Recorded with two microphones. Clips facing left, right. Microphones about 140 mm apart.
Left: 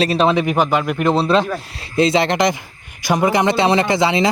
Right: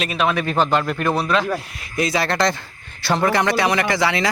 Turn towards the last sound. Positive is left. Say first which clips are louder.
# left 4 dB
turn(degrees=20)  # may be behind; listen again after turning